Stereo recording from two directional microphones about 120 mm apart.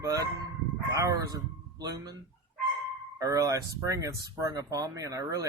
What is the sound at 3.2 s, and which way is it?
Speech, 30° right (ahead or behind).